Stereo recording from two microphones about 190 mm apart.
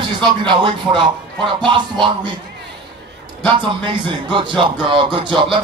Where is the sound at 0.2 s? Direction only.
25° right (ahead or behind).